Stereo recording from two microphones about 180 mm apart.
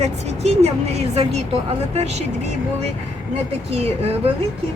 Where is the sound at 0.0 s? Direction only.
35° right (ahead or behind).